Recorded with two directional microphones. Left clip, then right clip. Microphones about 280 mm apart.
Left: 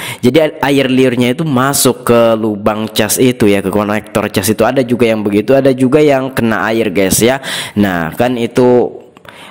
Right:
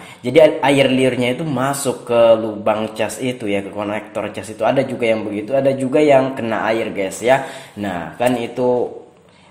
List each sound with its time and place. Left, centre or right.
0.2 s a man's voice: left